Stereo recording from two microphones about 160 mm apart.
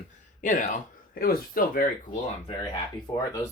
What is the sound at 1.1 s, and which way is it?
Speech, 65° left (ahead or behind).